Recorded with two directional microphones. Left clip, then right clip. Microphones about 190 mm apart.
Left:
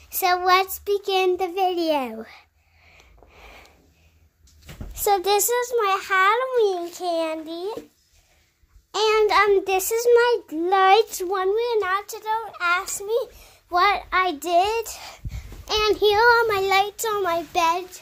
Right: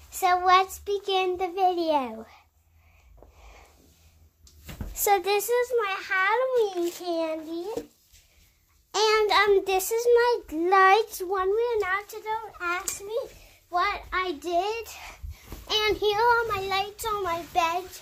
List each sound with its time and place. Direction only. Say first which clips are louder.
0.1 s child singing: left 2 dB; 35° left (ahead or behind)
2.1 s child singing: left 5 dB; 40° left (ahead or behind)
3.3 s sniff: left 9 dB; 40° left (ahead or behind)
4.9 s a sound: left 2 dB; 25° left (ahead or behind)
5.2 s a child's voice: left 3 dB; 55° left (ahead or behind)
8.9 s a child's voice: left 3 dB; 20° left (ahead or behind)
10.9 s a child's voice: left 4 dB; 40° left (ahead or behind)
13.7 s child singing: left 7 dB; 65° left (ahead or behind); by 15.1 s 45° left (ahead or behind)
15.6 s child singing: left 5 dB; 35° left (ahead or behind)